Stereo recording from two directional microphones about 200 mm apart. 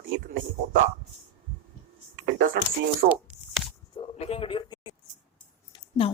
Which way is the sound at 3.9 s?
30° left (ahead or behind).